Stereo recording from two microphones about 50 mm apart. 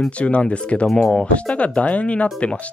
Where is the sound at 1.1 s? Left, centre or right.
Left.